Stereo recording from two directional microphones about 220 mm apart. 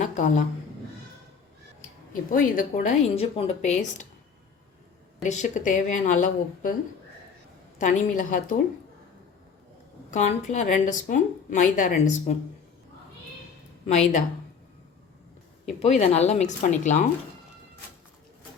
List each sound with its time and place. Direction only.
0.0 s a woman's voice: 35° left (ahead or behind)
2.3 s a woman's voice: 40° left (ahead or behind)
5.2 s a woman's voice: 35° left (ahead or behind)
7.8 s a woman's voice: 35° left (ahead or behind)
10.1 s a woman's voice: 30° left (ahead or behind)
15.8 s a woman's voice: 30° left (ahead or behind)